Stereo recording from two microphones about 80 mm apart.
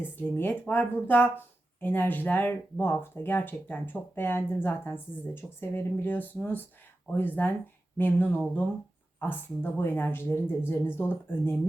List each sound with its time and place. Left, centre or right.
0.0 s speech: left